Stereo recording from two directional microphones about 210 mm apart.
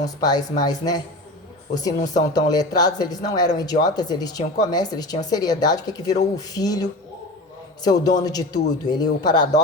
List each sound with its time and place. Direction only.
0.0 s a man's voice: 20° left (ahead or behind)
7.9 s a man's voice: 20° left (ahead or behind)